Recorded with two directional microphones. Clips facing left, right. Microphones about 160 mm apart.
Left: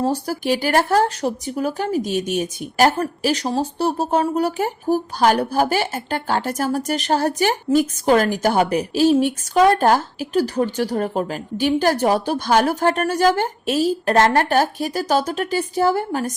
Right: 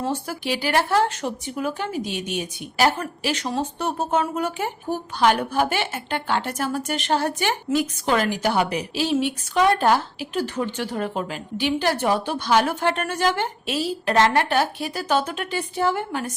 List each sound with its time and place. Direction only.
0.0 s speech: 40° left (ahead or behind)